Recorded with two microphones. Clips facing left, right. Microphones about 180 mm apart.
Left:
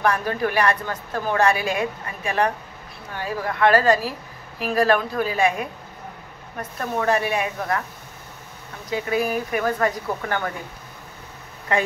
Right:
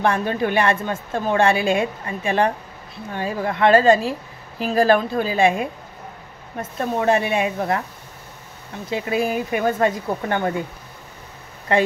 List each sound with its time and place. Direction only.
0.0 s speech: 25° right (ahead or behind)
8.9 s speech: 25° right (ahead or behind)
11.7 s speech: 30° right (ahead or behind)